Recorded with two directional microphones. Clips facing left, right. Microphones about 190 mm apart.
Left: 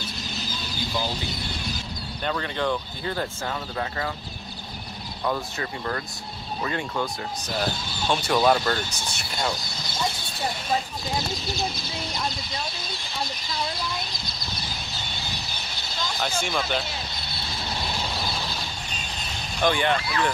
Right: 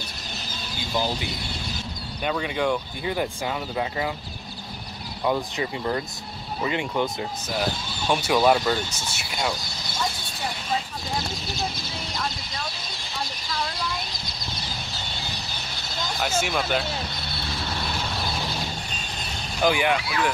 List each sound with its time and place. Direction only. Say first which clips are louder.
2.2 s speech: right 2 dB; 10° right (ahead or behind)
5.2 s speech: right 3 dB; 15° right (ahead or behind)
8.1 s speech: right 1 dB; 10° right (ahead or behind)
16.2 s speech: right 2 dB; 5° right (ahead or behind)
19.6 s speech: right 1 dB; 10° right (ahead or behind)